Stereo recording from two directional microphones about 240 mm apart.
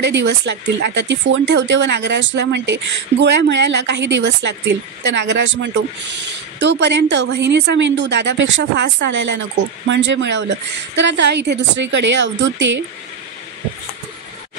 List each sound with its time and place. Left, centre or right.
0.0 s speech: right